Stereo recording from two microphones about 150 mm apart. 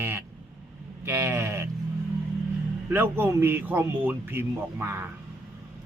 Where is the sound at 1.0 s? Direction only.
15° right (ahead or behind).